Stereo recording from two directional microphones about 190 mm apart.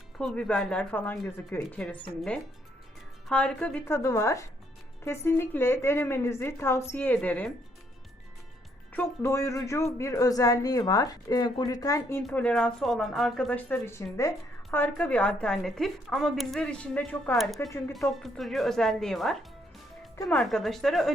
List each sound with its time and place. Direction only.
0.2 s speech: 5° left (ahead or behind)
8.9 s speech: 10° left (ahead or behind)